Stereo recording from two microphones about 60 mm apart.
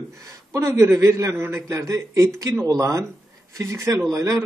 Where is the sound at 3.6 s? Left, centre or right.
Right.